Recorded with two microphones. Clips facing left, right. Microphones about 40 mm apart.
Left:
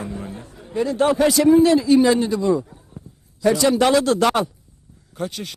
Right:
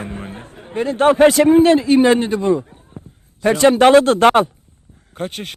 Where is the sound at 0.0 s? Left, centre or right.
Right.